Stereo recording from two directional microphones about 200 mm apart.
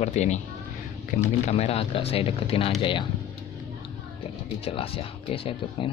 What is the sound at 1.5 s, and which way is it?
Speech, 30° left (ahead or behind).